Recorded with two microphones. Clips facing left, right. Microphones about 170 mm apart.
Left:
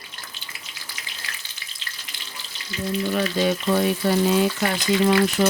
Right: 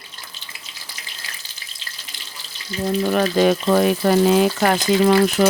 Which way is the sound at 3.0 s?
60° right (ahead or behind).